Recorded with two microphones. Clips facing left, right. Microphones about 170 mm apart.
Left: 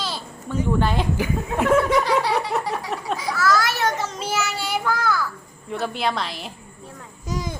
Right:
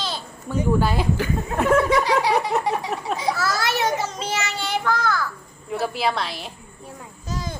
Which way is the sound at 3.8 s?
5° right (ahead or behind).